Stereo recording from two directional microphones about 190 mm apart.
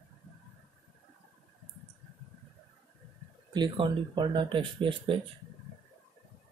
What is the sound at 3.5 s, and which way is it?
Speech, 25° right (ahead or behind).